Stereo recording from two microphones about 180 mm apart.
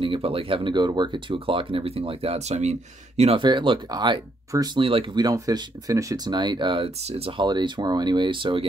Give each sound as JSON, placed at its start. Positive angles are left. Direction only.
{"t": 0.0, "sound": "speech", "side_deg": -30}